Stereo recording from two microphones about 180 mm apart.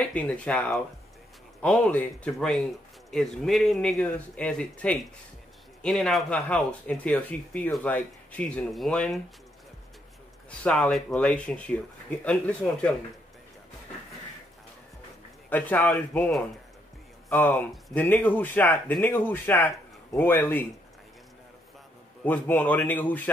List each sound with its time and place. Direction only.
0.0 s speech: 5° left (ahead or behind)
10.6 s speech: 5° left (ahead or behind)
15.5 s speech: 10° left (ahead or behind)
22.2 s speech: 10° left (ahead or behind)